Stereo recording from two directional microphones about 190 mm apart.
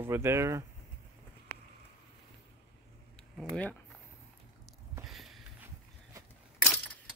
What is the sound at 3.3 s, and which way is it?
Speech, 5° left (ahead or behind).